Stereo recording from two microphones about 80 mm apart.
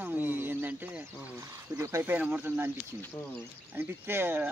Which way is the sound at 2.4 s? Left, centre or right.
Right.